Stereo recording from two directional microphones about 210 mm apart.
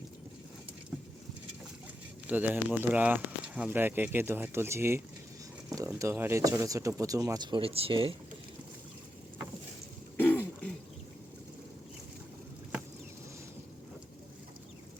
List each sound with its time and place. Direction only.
2.2 s speech: 10° right (ahead or behind); by 8.1 s 25° right (ahead or behind)
10.2 s throat clearing: 10° left (ahead or behind)